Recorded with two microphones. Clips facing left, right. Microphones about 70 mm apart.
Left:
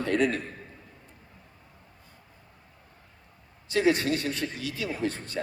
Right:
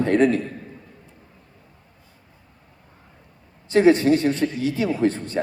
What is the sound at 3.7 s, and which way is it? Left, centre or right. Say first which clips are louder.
A man's voice: right 9 dB; right.